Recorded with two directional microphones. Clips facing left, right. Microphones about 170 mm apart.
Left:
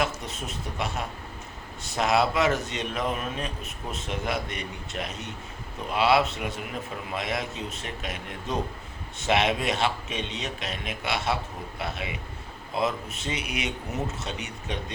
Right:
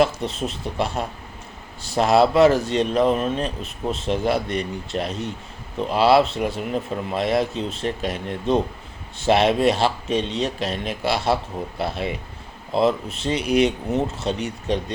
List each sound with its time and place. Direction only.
0.0 s speech: 30° right (ahead or behind)